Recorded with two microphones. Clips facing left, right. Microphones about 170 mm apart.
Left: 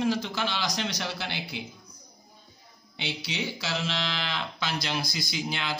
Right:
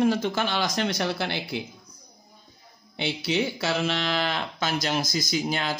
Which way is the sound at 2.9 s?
55° right (ahead or behind).